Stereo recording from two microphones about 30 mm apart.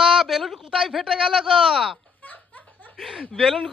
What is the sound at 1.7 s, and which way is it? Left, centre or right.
Speech, centre.